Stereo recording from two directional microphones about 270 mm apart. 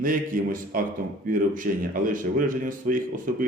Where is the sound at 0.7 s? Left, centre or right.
Right.